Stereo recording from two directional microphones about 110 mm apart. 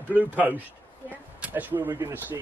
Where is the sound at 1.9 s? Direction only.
35° right (ahead or behind).